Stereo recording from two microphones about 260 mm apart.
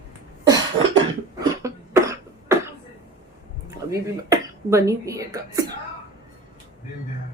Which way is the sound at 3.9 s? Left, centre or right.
Centre.